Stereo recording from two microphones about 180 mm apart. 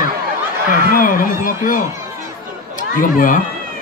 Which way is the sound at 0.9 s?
50° left (ahead or behind).